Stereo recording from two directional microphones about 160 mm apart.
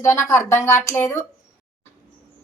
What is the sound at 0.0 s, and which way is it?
Speech, 15° left (ahead or behind).